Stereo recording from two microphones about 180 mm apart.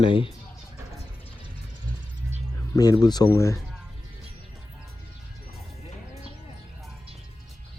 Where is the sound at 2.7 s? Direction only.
20° left (ahead or behind).